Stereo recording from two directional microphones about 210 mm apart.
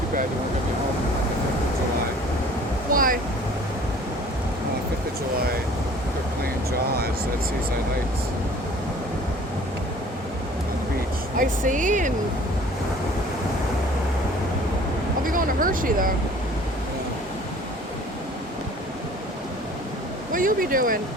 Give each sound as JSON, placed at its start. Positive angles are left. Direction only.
{"t": 2.9, "sound": "a sound", "side_deg": -40}
{"t": 6.4, "sound": "speech", "side_deg": -50}
{"t": 11.3, "sound": "speech", "side_deg": -40}
{"t": 15.3, "sound": "speech", "side_deg": -40}
{"t": 20.3, "sound": "speech", "side_deg": -40}